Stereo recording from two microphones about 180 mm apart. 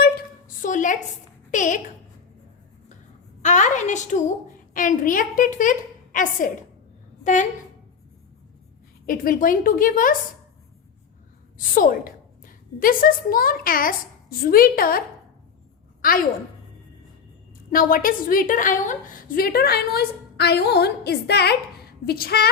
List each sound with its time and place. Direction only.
0.0 s a sound: 45° left (ahead or behind)
1.5 s speech: 45° left (ahead or behind)
3.4 s a woman's voice: 40° left (ahead or behind)
9.0 s a woman's voice: 50° left (ahead or behind)
11.5 s a woman's voice: 50° left (ahead or behind)
16.0 s a sound: 55° left (ahead or behind)
17.7 s a woman's voice: 50° left (ahead or behind)